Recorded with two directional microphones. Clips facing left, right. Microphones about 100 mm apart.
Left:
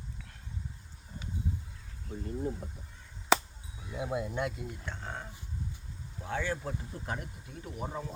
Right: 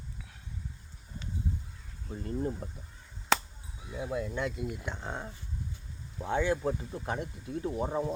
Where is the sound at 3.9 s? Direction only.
20° left (ahead or behind).